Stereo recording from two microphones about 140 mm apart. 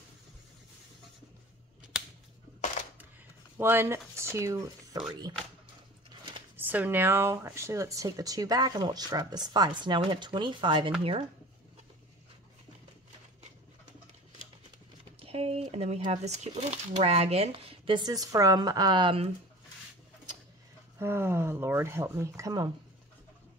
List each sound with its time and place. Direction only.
3.5 s speech: 15° right (ahead or behind)
6.5 s speech: 15° right (ahead or behind); by 11.2 s 40° right (ahead or behind)
15.1 s a sound: 45° right (ahead or behind)
16.7 s speech: 45° right (ahead or behind)
21.0 s speech: 15° right (ahead or behind)